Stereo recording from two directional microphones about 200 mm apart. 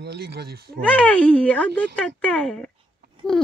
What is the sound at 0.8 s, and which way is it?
Speech, 5° left (ahead or behind).